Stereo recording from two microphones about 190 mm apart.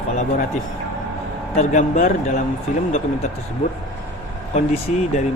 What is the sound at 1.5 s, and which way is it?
Speech, 40° left (ahead or behind).